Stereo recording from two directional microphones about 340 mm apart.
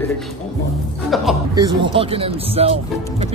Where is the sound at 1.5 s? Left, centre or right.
Centre.